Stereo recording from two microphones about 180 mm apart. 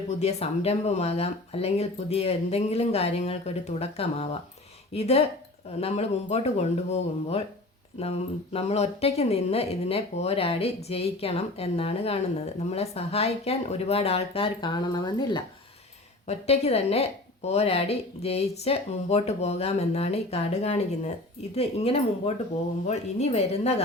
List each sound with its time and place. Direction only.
0.2 s speech: 35° left (ahead or behind)
16.2 s speech: 35° left (ahead or behind)